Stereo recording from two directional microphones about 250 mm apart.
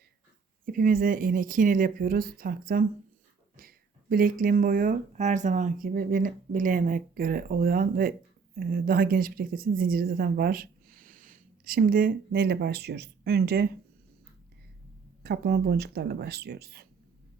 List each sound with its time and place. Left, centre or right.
0.6 s a woman's voice: right
15.2 s speech: right